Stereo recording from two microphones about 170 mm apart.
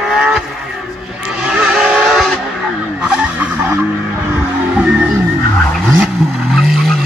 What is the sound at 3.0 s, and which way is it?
Skidding, 5° right (ahead or behind).